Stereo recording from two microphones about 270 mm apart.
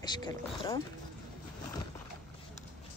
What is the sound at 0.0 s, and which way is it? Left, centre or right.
Speech, centre.